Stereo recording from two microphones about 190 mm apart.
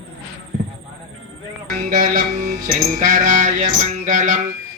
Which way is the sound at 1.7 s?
45° right (ahead or behind).